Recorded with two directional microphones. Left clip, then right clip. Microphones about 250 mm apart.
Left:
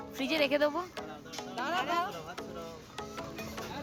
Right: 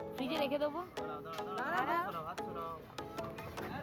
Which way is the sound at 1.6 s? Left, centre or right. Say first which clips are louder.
Left 3 dB; right.